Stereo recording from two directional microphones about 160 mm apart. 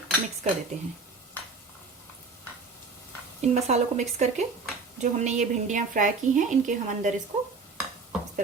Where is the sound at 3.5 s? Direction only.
45° right (ahead or behind).